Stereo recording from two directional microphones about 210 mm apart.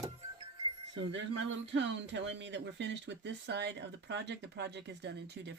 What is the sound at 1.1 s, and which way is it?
Speech, 60° right (ahead or behind).